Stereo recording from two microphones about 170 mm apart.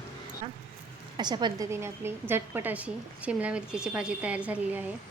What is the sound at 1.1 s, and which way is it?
Speech, 25° right (ahead or behind).